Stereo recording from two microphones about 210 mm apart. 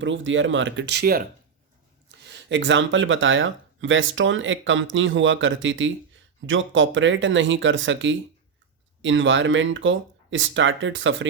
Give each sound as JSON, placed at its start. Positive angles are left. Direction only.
{"t": 0.0, "sound": "speech", "side_deg": -65}
{"t": 2.2, "sound": "speech", "side_deg": -60}